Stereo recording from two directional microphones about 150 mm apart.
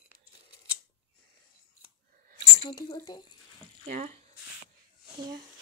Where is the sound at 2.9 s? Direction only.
30° left (ahead or behind).